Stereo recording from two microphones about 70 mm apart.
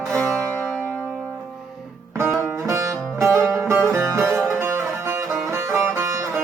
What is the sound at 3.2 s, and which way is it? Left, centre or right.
Music, right.